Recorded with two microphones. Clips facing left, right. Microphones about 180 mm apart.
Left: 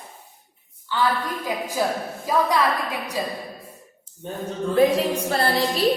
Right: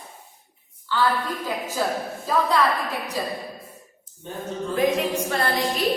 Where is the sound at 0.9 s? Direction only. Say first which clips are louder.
Even; 15° left (ahead or behind).